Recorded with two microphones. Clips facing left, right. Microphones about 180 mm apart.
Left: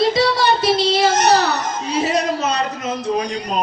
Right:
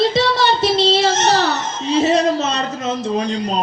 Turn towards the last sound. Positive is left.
turn(degrees=-25)  # may be behind; listen again after turning